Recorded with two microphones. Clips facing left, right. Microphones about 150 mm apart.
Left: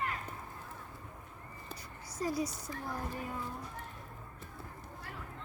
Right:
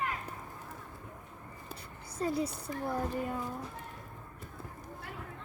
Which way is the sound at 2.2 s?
30° right (ahead or behind).